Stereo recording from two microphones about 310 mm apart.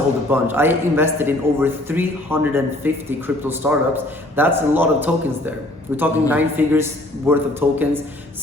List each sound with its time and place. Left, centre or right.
0.3 s a man's voice: centre